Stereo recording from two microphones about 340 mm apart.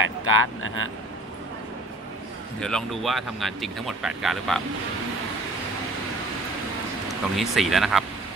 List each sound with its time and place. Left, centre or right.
0.0 s a sound: right
0.6 s speech: left
2.6 s speech: centre
7.1 s speech: centre